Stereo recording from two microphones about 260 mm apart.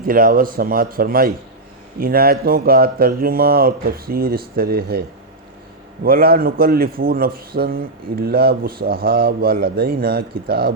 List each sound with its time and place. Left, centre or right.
0.0 s a man's voice: right
6.1 s a man's voice: right